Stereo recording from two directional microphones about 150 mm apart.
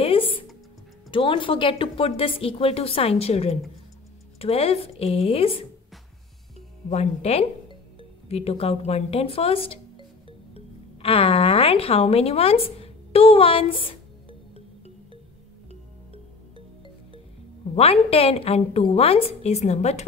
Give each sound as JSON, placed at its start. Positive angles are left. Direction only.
{"t": 0.0, "sound": "music", "side_deg": 40}
{"t": 1.1, "sound": "a woman's voice", "side_deg": 35}
{"t": 6.9, "sound": "speech", "side_deg": 45}
{"t": 17.7, "sound": "a woman's voice", "side_deg": 40}